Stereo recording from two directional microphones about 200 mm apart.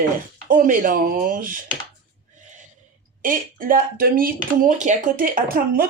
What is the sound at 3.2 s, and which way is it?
Speech, 45° right (ahead or behind).